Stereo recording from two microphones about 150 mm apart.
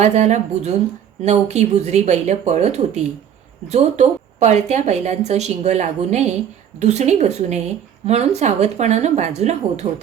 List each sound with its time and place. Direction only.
0.0 s speech: 50° right (ahead or behind)